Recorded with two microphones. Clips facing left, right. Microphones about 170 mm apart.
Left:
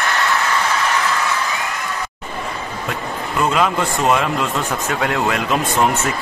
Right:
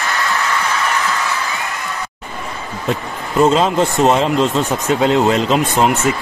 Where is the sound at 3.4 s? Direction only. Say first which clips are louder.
Right 5 dB; 25° right (ahead or behind).